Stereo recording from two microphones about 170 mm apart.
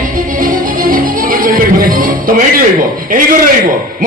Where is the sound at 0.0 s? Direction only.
50° right (ahead or behind).